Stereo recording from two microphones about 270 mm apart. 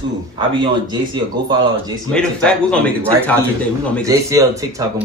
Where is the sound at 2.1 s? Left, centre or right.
Centre.